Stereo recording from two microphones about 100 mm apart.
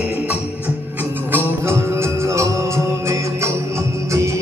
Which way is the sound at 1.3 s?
25° right (ahead or behind).